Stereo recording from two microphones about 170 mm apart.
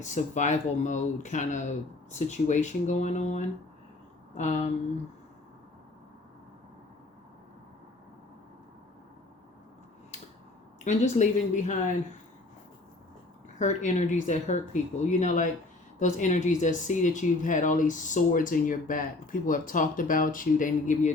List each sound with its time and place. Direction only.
0.0 s speech: 45° left (ahead or behind)
10.8 s speech: 45° left (ahead or behind)
13.6 s speech: 45° left (ahead or behind)